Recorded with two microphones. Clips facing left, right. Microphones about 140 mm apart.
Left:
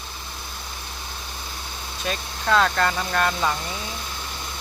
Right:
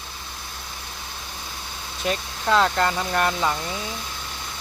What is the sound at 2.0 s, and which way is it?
Speech, 20° right (ahead or behind).